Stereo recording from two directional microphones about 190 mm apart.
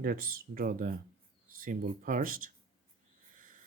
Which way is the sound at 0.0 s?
50° right (ahead or behind).